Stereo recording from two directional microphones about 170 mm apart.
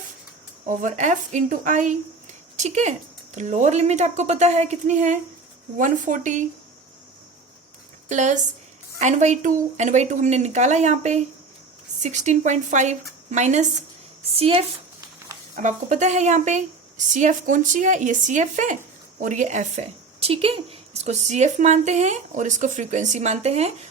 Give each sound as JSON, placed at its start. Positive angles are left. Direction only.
{"t": 0.7, "sound": "a woman's voice", "side_deg": -45}
{"t": 8.1, "sound": "a woman's voice", "side_deg": -45}
{"t": 15.5, "sound": "a woman's voice", "side_deg": -45}